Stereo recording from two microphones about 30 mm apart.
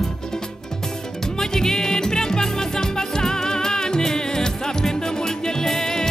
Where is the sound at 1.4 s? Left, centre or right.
Centre.